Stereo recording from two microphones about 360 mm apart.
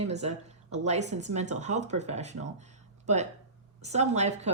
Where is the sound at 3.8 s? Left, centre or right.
Centre.